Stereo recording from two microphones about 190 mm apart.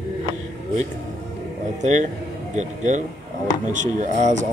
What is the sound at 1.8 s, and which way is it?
Speech, 40° right (ahead or behind).